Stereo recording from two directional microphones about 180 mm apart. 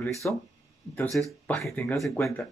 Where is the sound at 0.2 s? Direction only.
10° left (ahead or behind).